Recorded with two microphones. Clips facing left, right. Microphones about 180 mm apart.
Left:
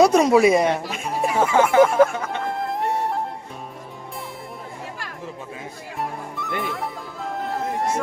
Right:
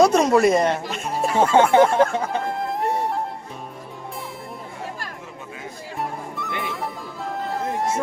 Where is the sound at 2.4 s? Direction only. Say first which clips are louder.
Even; centre (ahead or behind).